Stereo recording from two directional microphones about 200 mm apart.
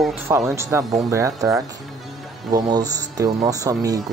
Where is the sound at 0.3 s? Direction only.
15° right (ahead or behind).